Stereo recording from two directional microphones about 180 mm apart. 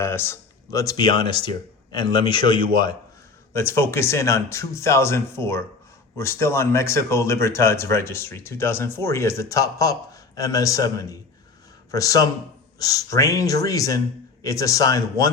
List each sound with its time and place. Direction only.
0.0 s speech: 15° left (ahead or behind)
3.5 s speech: 15° left (ahead or behind)